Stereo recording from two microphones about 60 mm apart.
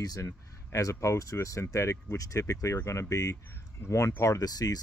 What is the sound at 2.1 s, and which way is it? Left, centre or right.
Speech, left.